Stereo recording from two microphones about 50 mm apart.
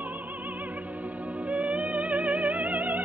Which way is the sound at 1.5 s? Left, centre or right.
Right.